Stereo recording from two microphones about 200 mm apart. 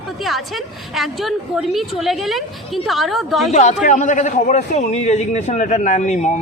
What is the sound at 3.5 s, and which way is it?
A man's voice, 35° left (ahead or behind).